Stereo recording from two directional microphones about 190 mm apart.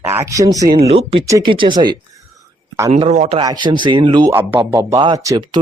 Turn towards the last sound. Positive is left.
turn(degrees=-20)  # may be behind; listen again after turning